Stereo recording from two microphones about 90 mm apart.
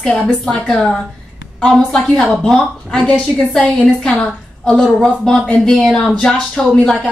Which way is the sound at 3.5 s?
10° left (ahead or behind).